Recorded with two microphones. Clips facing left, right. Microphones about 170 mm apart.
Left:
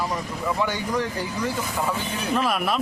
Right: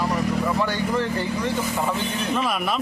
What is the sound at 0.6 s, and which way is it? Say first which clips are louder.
Speech: right 2 dB; 15° left (ahead or behind).